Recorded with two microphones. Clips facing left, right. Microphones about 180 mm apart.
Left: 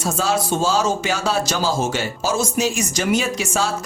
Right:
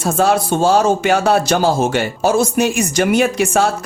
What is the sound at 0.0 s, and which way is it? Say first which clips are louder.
Speech: right 6 dB; 60° right (ahead or behind).